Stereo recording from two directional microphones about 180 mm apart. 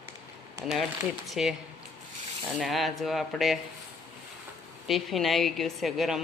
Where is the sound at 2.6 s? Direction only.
Centre (ahead or behind).